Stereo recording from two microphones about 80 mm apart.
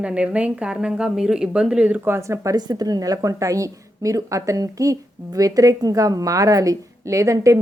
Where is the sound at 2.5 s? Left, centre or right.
Right.